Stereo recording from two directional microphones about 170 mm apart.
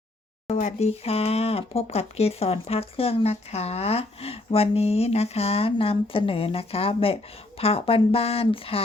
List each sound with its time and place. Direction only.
0.4 s speech: 45° left (ahead or behind)